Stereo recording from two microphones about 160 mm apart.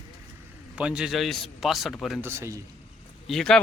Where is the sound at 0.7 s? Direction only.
5° right (ahead or behind).